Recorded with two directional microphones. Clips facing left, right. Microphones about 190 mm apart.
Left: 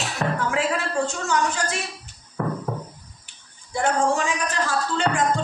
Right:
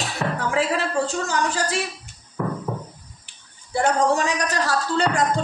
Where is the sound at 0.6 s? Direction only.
35° right (ahead or behind).